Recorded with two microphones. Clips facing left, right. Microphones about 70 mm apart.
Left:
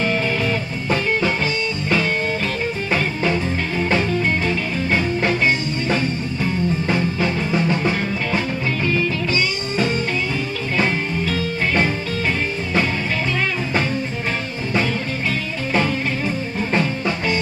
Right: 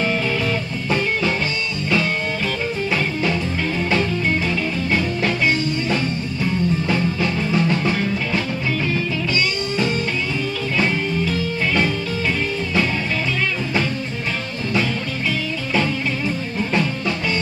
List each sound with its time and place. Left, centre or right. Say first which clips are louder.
4.5 s music: even; left
6.9 s music: even; centre
9.3 s music: even; left
16.7 s music: left 1 dB; left